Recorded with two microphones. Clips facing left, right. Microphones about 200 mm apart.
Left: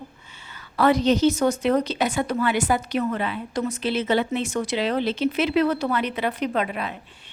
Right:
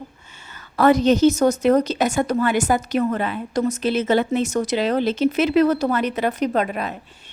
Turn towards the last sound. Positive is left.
turn(degrees=-45)  # may be behind; listen again after turning